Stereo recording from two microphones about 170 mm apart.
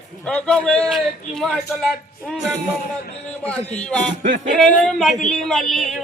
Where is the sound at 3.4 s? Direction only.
5° left (ahead or behind).